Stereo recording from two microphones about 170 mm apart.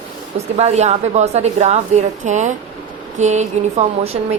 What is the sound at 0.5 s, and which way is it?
Speech, 40° right (ahead or behind).